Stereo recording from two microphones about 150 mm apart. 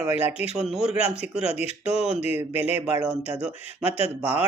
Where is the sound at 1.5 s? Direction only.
45° left (ahead or behind).